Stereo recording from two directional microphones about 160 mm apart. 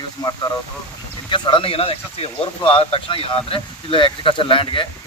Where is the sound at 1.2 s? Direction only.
30° left (ahead or behind).